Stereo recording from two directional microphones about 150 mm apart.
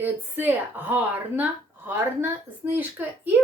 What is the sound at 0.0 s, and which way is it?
Speech, 10° right (ahead or behind).